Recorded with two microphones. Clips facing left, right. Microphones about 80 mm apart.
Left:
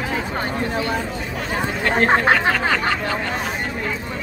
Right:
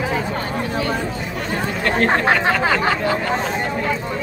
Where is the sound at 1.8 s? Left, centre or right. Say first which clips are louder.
Left 1 dB; centre.